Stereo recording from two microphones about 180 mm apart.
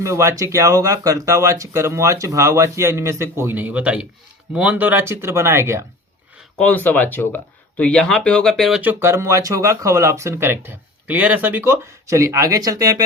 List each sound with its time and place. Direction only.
0.0 s speech: 15° right (ahead or behind)
6.6 s speech: 10° left (ahead or behind); by 13.0 s 20° right (ahead or behind)